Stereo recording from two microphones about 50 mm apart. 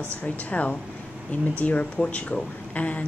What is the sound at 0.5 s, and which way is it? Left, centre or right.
A woman's voice, left.